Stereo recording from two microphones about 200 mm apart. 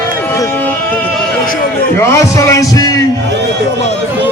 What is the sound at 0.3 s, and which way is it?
Music, 10° left (ahead or behind).